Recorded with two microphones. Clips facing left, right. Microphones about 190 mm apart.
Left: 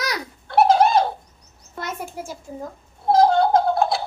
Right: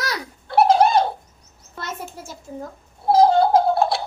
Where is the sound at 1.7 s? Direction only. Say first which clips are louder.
Left 2 dB; 15° left (ahead or behind).